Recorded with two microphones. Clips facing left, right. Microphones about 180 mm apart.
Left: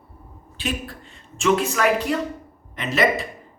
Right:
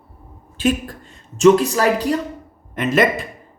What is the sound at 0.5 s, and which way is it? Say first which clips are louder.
A woman's voice: right 9 dB; 45° right (ahead or behind).